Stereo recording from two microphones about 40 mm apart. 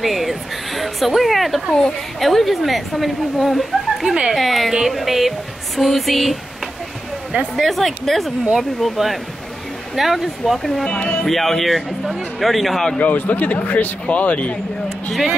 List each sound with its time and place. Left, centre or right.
0.0 s a sound: centre
2.1 s speech: centre
4.1 s speech: right
4.4 s speech: centre
7.5 s speech: centre
10.9 s speech: left
11.2 s speech: centre
13.0 s speech: left